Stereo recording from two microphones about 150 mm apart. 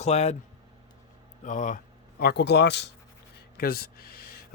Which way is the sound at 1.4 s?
55° left (ahead or behind).